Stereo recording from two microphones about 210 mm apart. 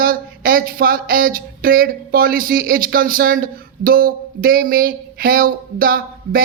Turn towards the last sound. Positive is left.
turn(degrees=-45)  # may be behind; listen again after turning